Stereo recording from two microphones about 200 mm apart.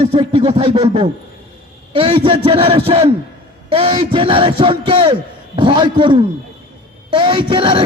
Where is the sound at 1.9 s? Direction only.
30° right (ahead or behind).